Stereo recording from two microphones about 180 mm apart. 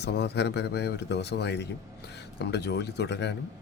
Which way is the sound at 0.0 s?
70° left (ahead or behind).